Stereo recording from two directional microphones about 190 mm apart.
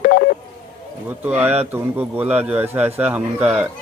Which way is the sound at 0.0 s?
50° left (ahead or behind).